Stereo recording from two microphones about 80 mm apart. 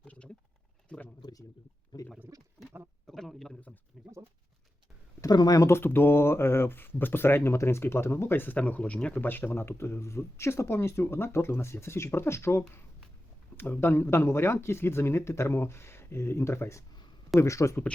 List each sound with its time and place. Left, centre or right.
0.9 s a sound: centre
1.2 s speech: left
1.9 s speech: left
2.3 s speech: right
3.1 s a sound: centre
5.3 s speech: left
5.5 s speech: left; by 9.2 s centre
9.2 s speech: left